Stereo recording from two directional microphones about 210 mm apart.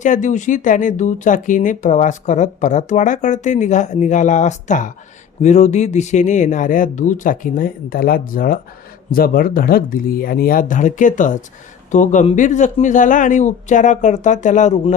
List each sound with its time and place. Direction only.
0.0 s speech: 35° left (ahead or behind)